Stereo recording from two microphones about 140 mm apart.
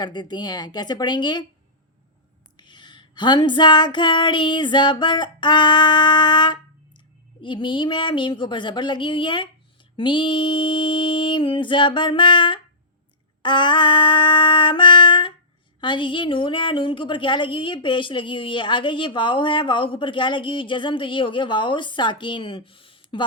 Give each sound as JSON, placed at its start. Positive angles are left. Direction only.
{"t": 0.0, "sound": "a woman's voice", "side_deg": 30}
{"t": 2.6, "sound": "female singing", "side_deg": 35}
{"t": 7.4, "sound": "a woman's voice", "side_deg": 35}